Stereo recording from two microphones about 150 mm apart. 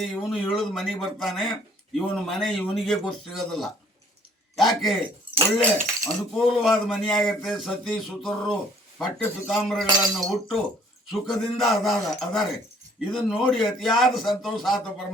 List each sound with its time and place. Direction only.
0.0 s a man's voice: centre (ahead or behind)
5.5 s speech: 65° right (ahead or behind)
6.3 s speech: centre (ahead or behind)